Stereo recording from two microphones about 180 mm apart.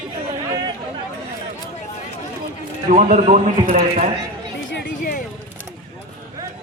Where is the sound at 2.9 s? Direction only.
45° right (ahead or behind).